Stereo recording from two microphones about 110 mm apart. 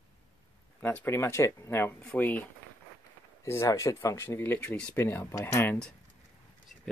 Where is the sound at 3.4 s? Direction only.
25° left (ahead or behind).